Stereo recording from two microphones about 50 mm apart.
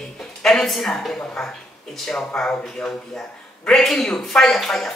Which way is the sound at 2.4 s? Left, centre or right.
Left.